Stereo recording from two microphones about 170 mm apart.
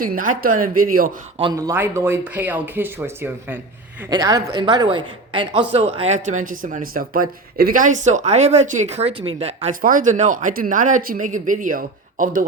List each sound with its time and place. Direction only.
0.0 s a woman's voice: 55° right (ahead or behind)
1.5 s speech: 15° right (ahead or behind); by 9.7 s 35° right (ahead or behind)
9.8 s speech: 50° right (ahead or behind)